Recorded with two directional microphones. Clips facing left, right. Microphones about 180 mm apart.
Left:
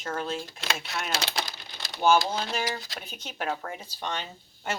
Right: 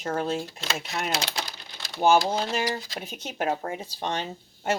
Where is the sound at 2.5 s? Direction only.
25° right (ahead or behind).